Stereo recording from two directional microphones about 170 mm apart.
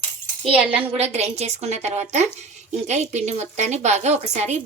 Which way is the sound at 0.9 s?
40° right (ahead or behind).